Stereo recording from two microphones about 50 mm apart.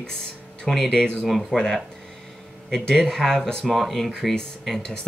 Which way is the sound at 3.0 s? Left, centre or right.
Centre.